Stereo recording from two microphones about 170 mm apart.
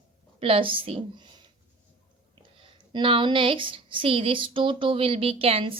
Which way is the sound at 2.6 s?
30° right (ahead or behind).